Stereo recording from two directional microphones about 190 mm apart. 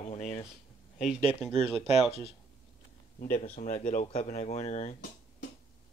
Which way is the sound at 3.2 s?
40° left (ahead or behind).